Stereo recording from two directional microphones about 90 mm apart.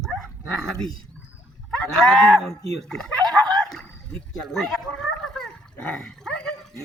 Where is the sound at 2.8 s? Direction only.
5° left (ahead or behind).